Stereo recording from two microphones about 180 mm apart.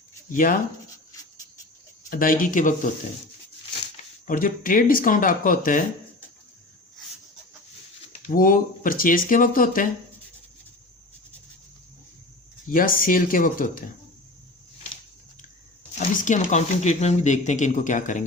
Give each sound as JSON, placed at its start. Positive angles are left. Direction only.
{"t": 0.3, "sound": "speech", "side_deg": 50}
{"t": 2.0, "sound": "speech", "side_deg": 50}
{"t": 4.3, "sound": "speech", "side_deg": 50}
{"t": 8.3, "sound": "speech", "side_deg": 50}
{"t": 12.7, "sound": "speech", "side_deg": 50}
{"t": 16.0, "sound": "speech", "side_deg": 45}